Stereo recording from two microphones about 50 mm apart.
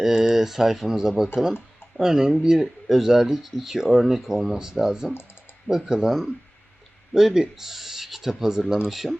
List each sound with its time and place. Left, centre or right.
0.0 s speech: centre